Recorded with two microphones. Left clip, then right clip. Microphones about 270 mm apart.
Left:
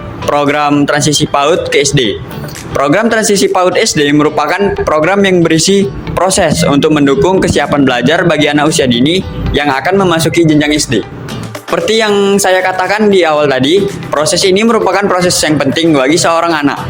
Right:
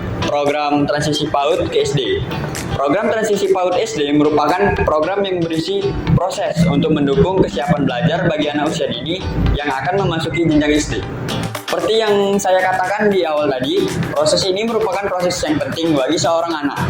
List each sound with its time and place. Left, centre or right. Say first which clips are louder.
0.3 s speech: left 7 dB; left
1.8 s speech: left 6 dB; left
2.8 s speech: left 6 dB; left
11.9 s speech: left 6 dB; left